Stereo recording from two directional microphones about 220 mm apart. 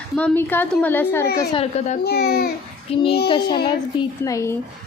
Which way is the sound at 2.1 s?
45° left (ahead or behind).